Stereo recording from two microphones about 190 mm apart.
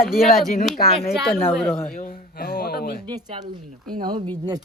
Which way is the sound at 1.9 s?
50° left (ahead or behind).